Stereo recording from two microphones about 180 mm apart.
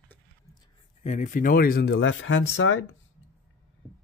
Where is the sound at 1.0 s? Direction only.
45° left (ahead or behind); by 2.8 s 90° left.